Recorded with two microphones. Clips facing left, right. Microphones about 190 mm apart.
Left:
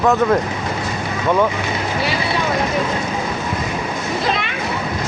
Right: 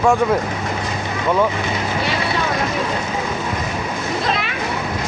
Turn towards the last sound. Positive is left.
turn(degrees=0)  # may be behind; listen again after turning